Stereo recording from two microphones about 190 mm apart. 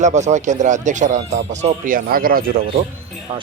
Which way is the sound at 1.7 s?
50° right (ahead or behind).